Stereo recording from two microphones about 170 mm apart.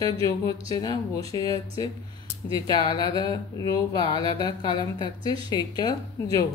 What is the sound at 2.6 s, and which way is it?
Speech, 25° left (ahead or behind).